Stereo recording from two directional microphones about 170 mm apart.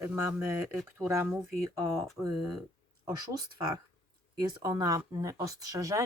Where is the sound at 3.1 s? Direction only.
20° right (ahead or behind).